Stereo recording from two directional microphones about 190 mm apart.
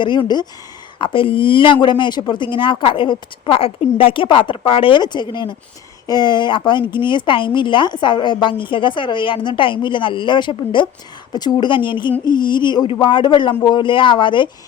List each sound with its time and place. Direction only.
0.0 s speech: 25° left (ahead or behind)